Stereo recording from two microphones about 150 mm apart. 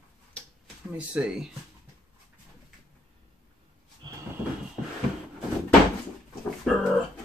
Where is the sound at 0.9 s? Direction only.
5° right (ahead or behind).